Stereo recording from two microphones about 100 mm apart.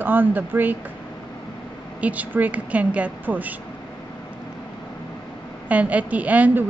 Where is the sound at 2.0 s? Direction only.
15° right (ahead or behind).